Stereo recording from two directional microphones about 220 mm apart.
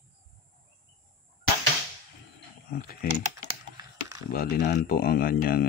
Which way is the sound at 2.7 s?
45° left (ahead or behind).